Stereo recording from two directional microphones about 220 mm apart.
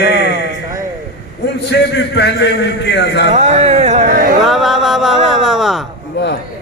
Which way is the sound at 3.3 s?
30° right (ahead or behind).